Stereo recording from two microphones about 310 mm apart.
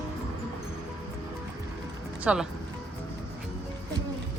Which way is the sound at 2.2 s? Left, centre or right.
Centre.